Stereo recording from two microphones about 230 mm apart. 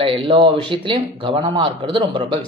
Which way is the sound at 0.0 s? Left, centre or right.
Right.